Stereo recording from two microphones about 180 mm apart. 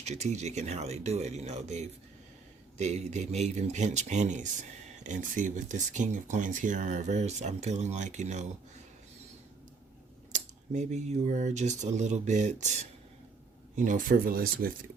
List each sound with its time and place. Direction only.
0.0 s speech: 40° right (ahead or behind)
10.3 s speech: 40° right (ahead or behind)